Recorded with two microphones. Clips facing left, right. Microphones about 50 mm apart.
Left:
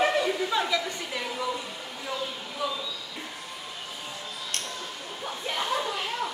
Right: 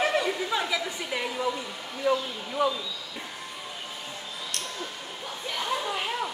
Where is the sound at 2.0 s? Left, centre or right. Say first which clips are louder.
Right 8 dB; right.